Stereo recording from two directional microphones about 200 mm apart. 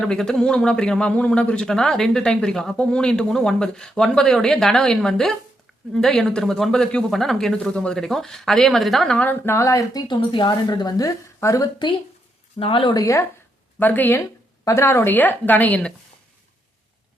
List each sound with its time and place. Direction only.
0.0 s a woman's voice: 5° left (ahead or behind)